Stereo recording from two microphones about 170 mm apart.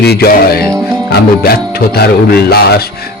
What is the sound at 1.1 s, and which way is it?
Speech, 65° left (ahead or behind).